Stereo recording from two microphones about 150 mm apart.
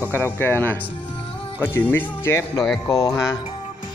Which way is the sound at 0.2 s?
15° left (ahead or behind).